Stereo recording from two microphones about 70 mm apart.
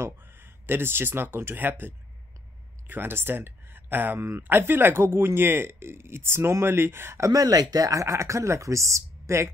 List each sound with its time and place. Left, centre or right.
0.0 s speech: right
7.2 s speech: right